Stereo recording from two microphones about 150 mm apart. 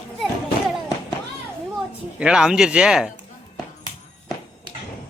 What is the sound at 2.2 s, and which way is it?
Speech, 5° right (ahead or behind).